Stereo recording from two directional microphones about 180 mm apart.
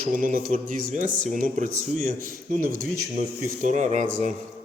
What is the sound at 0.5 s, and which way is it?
Speech, 40° right (ahead or behind).